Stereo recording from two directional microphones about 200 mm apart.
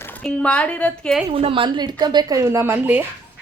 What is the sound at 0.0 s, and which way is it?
Speech, 5° left (ahead or behind).